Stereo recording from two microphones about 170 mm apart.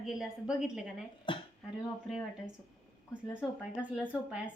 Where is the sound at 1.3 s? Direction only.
30° left (ahead or behind).